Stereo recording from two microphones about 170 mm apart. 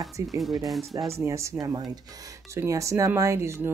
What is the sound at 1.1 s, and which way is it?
Speech, 15° right (ahead or behind).